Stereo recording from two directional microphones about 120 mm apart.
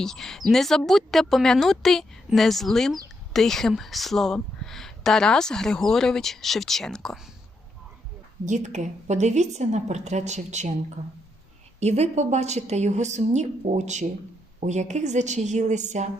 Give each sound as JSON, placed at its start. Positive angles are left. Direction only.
{"t": 0.0, "sound": "speech", "side_deg": 5}
{"t": 8.4, "sound": "a woman's voice", "side_deg": -85}
{"t": 11.8, "sound": "a woman's voice", "side_deg": -65}